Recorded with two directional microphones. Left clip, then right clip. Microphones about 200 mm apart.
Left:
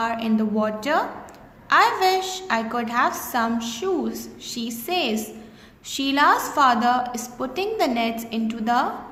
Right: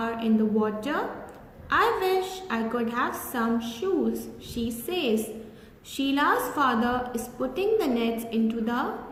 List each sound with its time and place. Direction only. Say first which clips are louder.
0.0 s a woman's voice: left 3 dB; 50° left (ahead or behind)